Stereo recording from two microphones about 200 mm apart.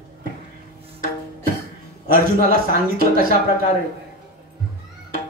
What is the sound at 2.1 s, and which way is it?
Speech, 45° right (ahead or behind).